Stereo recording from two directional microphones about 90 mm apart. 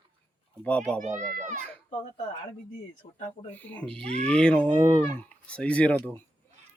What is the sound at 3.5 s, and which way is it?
Speech, 15° left (ahead or behind).